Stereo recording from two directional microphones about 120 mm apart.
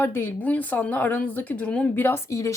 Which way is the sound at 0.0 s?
15° left (ahead or behind).